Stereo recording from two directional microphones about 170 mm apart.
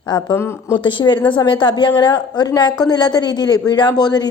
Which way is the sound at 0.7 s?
30° left (ahead or behind).